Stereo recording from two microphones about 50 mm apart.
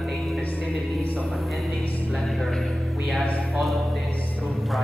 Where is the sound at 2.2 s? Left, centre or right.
Centre.